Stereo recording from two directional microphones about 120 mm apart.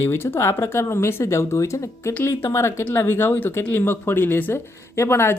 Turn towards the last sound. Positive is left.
turn(degrees=20)  # may be behind; listen again after turning